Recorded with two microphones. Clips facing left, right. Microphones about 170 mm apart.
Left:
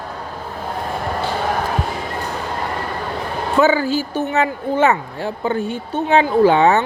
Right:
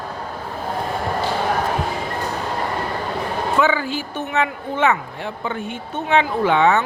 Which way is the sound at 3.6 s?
40° left (ahead or behind).